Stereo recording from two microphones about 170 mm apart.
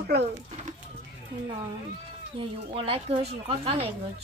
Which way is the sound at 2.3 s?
35° right (ahead or behind).